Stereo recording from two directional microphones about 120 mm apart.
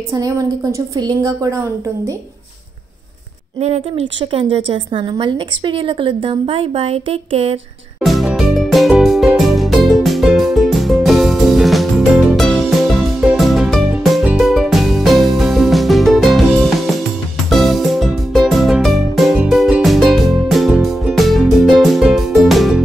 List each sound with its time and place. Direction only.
0.1 s a woman's voice: 30° right (ahead or behind)
3.5 s a woman's voice: 60° right (ahead or behind)
8.0 s music: centre (ahead or behind)